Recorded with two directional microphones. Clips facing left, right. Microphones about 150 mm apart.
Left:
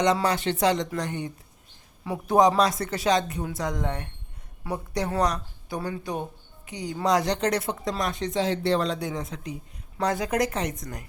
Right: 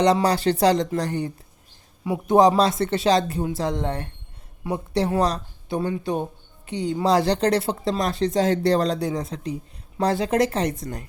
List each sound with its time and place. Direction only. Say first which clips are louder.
0.0 s speech: right 4 dB; 35° right (ahead or behind)
2.0 s speech: right 4 dB; 15° right (ahead or behind)